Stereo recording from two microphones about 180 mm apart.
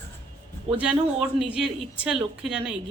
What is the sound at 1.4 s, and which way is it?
A woman's voice, 5° right (ahead or behind).